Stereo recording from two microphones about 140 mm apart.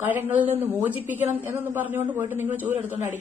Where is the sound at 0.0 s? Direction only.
15° right (ahead or behind).